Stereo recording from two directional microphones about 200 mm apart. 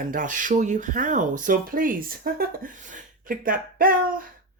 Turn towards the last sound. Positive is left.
turn(degrees=-45)  # may be behind; listen again after turning